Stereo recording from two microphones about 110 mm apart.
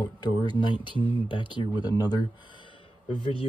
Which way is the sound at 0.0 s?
45° left (ahead or behind).